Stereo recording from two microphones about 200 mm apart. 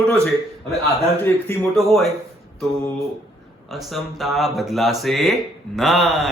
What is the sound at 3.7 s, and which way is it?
Speech, centre (ahead or behind).